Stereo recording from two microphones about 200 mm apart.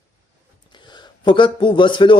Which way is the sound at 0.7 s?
20° left (ahead or behind).